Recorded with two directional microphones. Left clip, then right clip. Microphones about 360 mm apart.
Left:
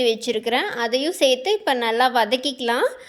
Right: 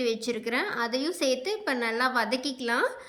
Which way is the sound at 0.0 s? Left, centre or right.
Centre.